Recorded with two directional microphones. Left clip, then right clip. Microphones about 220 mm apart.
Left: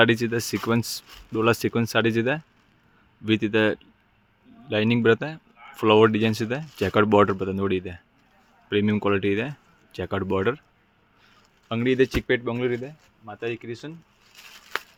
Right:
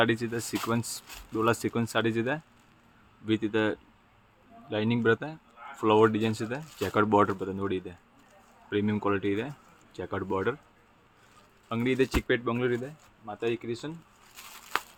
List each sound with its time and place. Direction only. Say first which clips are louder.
0.0 s speech: left 7 dB; 45° left (ahead or behind)
11.7 s speech: left 5 dB; 35° left (ahead or behind)
14.3 s a sound: left 1 dB; 5° left (ahead or behind)